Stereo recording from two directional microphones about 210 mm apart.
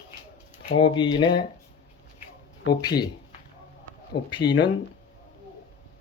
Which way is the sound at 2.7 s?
20° left (ahead or behind).